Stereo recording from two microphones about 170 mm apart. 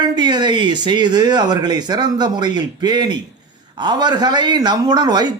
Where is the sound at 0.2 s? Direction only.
25° right (ahead or behind).